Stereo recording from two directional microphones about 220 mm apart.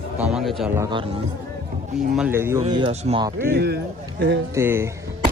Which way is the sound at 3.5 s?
50° right (ahead or behind).